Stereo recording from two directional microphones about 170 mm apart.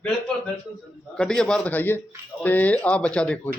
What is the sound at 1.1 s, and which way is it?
Speech, 5° left (ahead or behind).